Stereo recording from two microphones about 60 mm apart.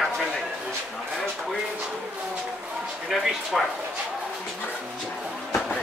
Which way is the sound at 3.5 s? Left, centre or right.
Centre.